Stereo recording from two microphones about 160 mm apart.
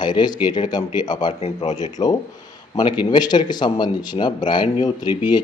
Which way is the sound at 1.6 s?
50° left (ahead or behind).